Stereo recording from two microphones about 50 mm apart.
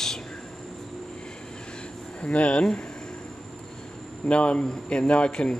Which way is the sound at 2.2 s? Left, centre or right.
Left.